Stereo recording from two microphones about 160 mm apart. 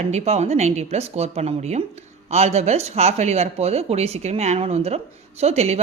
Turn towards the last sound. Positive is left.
turn(degrees=-40)  # may be behind; listen again after turning